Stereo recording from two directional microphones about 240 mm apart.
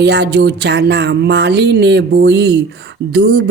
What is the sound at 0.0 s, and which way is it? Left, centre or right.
Speech, right.